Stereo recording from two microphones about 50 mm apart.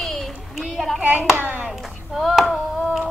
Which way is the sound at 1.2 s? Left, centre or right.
Right.